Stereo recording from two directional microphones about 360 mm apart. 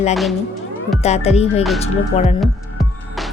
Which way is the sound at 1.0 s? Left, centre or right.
Centre.